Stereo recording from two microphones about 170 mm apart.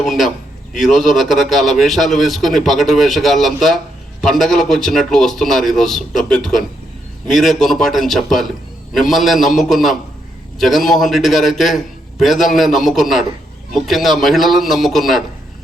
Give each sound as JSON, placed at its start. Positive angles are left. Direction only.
{"t": 0.0, "sound": "speech", "side_deg": 0}